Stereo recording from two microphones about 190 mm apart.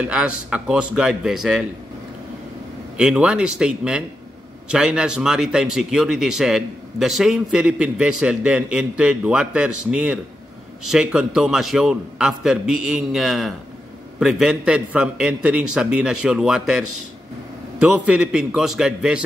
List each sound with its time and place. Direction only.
0.0 s speech: 5° right (ahead or behind)
3.0 s speech: 5° right (ahead or behind)